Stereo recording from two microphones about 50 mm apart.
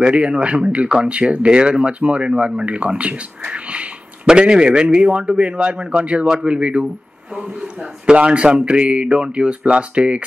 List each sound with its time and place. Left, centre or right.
0.0 s speech: right
8.1 s speech: right